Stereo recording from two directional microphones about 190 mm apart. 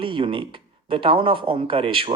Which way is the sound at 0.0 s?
25° right (ahead or behind).